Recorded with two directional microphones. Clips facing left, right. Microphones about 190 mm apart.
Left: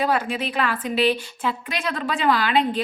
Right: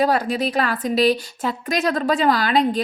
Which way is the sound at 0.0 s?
40° right (ahead or behind).